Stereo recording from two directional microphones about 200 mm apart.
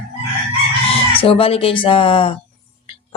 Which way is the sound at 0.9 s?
25° left (ahead or behind).